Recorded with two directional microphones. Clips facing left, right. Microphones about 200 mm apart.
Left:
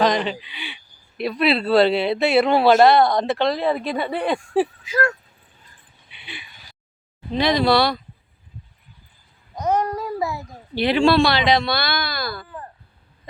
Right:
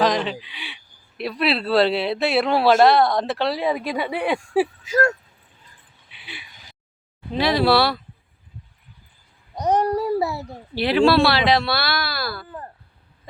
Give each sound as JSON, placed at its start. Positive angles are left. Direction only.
{"t": 0.0, "sound": "speech", "side_deg": 0}
{"t": 4.8, "sound": "speech", "side_deg": -45}
{"t": 6.1, "sound": "a sound", "side_deg": -5}
{"t": 7.3, "sound": "speech", "side_deg": -5}
{"t": 9.6, "sound": "speech", "side_deg": -35}
{"t": 10.8, "sound": "speech", "side_deg": -5}